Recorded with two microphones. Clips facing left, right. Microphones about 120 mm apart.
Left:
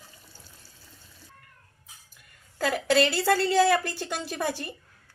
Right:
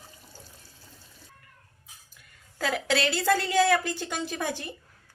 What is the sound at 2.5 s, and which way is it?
A woman's voice, 5° left (ahead or behind).